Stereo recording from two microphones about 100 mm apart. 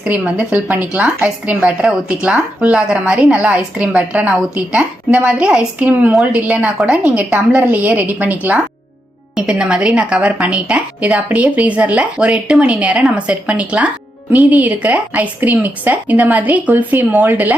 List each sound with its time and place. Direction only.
0.0 s speech: 10° right (ahead or behind)